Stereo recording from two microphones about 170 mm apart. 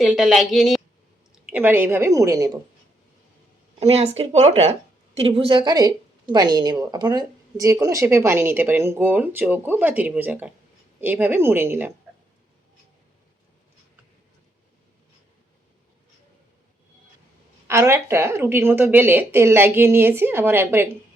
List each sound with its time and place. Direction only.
0.0 s a woman's voice: centre (ahead or behind)
1.5 s a woman's voice: 10° right (ahead or behind)
3.8 s a woman's voice: 35° right (ahead or behind); by 11.9 s 15° right (ahead or behind)
17.7 s a woman's voice: 15° right (ahead or behind)